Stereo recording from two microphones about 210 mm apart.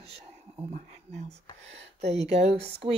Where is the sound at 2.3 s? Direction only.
30° right (ahead or behind).